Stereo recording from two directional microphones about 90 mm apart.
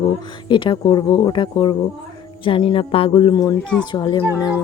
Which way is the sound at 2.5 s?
80° left.